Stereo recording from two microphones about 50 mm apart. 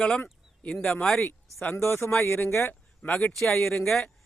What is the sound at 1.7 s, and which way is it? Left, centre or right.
Speech, left.